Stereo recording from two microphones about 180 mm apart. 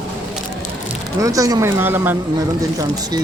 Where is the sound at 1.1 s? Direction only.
20° right (ahead or behind).